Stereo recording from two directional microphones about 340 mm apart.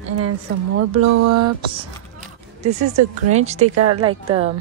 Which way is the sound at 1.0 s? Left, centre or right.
Right.